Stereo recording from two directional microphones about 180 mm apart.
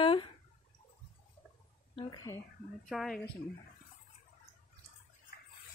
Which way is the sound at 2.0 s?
25° left (ahead or behind).